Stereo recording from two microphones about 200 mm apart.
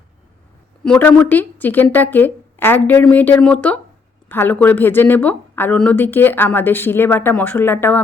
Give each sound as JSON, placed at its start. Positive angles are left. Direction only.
{"t": 0.9, "sound": "a woman's voice", "side_deg": 5}